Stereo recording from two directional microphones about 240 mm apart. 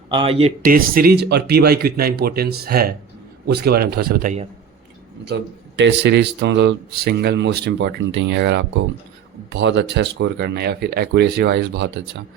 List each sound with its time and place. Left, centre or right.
0.1 s speech: right
0.6 s speech: right
5.2 s a man's voice: right